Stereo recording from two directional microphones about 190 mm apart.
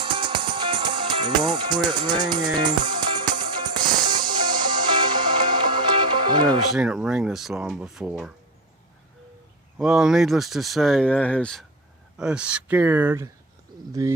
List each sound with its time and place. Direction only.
0.0 s music: 25° right (ahead or behind)
6.7 s speech: 5° right (ahead or behind)
9.7 s speech: centre (ahead or behind)